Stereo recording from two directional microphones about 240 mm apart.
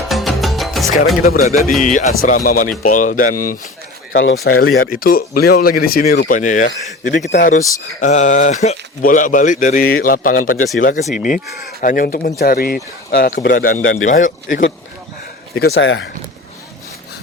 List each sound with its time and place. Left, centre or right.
0.1 s music: centre
1.2 s speech: left
4.1 s speech: left
4.8 s speech: left